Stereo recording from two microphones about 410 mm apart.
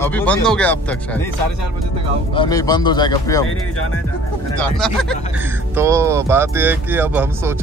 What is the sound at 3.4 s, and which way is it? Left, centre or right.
Speech, left.